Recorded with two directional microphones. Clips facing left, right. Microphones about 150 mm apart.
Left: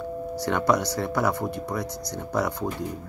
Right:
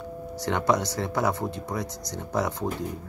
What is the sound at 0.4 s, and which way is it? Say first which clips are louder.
Speech: left 1 dB; 20° right (ahead or behind).